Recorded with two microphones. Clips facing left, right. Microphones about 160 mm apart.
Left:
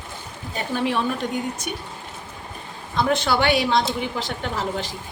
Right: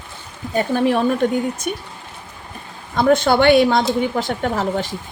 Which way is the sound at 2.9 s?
50° right (ahead or behind).